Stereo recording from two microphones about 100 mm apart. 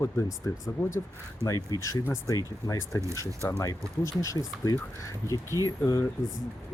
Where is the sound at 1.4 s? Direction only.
35° left (ahead or behind).